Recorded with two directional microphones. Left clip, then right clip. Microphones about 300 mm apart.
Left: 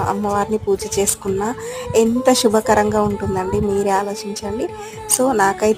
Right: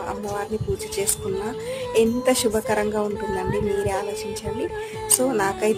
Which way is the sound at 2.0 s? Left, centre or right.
Centre.